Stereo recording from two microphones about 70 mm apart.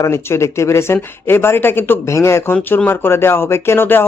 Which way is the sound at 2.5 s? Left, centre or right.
Left.